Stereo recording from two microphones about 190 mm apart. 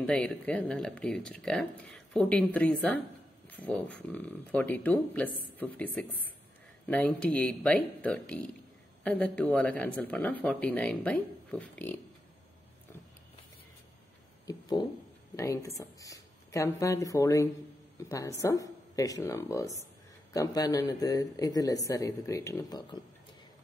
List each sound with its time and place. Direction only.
0.0 s speech: 5° left (ahead or behind)
14.4 s speech: 20° left (ahead or behind)